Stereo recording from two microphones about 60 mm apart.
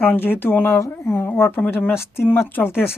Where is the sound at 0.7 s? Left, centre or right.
Left.